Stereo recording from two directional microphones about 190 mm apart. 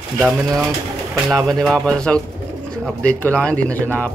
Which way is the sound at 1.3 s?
Centre (ahead or behind).